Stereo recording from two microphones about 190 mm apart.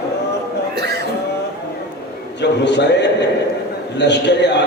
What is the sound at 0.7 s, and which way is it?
Music, 60° right (ahead or behind).